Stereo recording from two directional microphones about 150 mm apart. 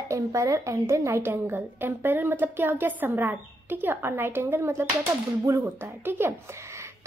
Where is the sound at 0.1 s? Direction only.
20° right (ahead or behind).